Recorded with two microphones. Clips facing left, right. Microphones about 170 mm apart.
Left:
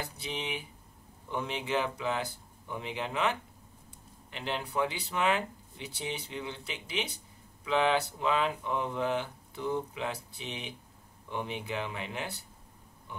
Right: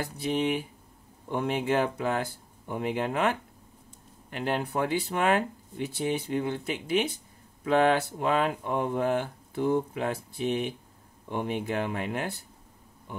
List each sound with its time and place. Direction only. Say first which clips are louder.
0.0 s speech: right 10 dB; 50° right (ahead or behind)